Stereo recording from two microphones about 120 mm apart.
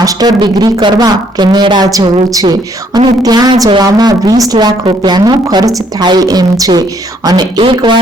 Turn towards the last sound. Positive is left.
turn(degrees=-45)  # may be behind; listen again after turning